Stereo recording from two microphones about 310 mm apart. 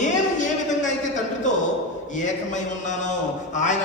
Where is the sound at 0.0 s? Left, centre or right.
Left.